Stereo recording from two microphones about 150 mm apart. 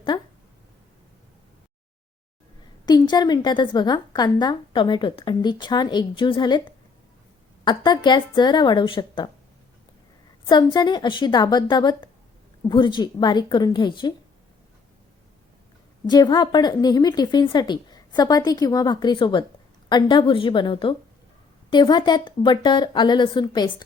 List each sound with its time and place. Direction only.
0.1 s a sound: 40° left (ahead or behind)
2.8 s a woman's voice: 30° left (ahead or behind)
10.4 s a woman's voice: 25° left (ahead or behind)
16.0 s a woman's voice: 25° left (ahead or behind)